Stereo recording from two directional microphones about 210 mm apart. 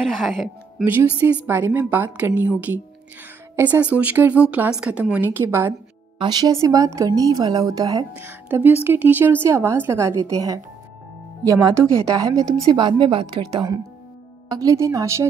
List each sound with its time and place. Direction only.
0.0 s speech: centre (ahead or behind)